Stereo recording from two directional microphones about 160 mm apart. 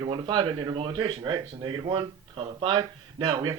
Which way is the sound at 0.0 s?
30° right (ahead or behind).